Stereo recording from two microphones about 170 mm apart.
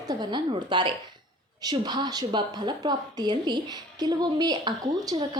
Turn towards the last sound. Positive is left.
turn(degrees=-25)  # may be behind; listen again after turning